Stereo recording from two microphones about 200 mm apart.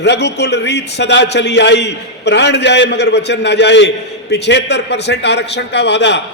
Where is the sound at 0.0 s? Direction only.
60° left (ahead or behind).